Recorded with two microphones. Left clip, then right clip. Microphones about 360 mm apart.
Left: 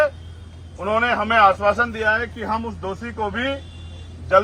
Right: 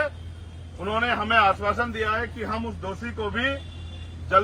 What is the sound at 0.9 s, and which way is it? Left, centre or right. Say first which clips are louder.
A man's voice: left 5 dB; centre.